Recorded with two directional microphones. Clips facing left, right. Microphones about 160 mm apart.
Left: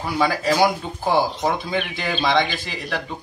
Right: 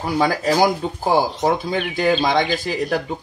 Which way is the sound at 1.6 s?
40° right (ahead or behind).